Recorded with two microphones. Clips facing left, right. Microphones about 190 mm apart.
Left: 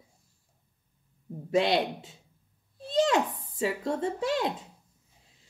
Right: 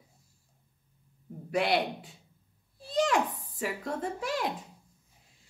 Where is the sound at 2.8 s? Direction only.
25° left (ahead or behind).